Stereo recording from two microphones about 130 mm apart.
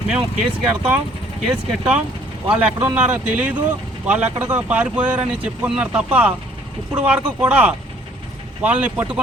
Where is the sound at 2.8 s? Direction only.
10° right (ahead or behind).